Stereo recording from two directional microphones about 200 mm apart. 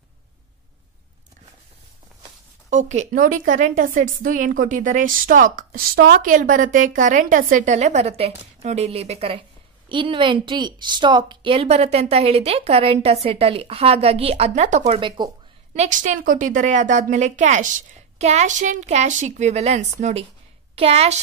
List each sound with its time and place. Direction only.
2.7 s a woman's voice: 35° right (ahead or behind)
14.9 s speech: 25° right (ahead or behind)
15.7 s a woman's voice: 35° right (ahead or behind)